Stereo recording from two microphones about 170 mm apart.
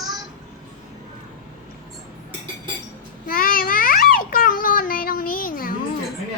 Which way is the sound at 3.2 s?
55° left (ahead or behind).